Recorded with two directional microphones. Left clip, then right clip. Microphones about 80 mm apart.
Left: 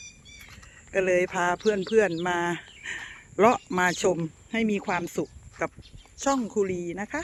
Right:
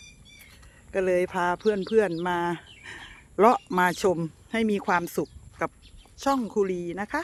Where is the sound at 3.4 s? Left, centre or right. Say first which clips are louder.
Right 1 dB; right.